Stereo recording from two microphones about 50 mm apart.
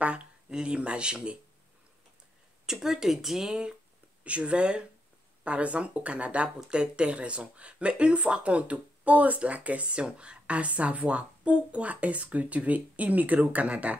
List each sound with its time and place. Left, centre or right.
0.0 s speech: right
2.6 s speech: centre
4.2 s speech: right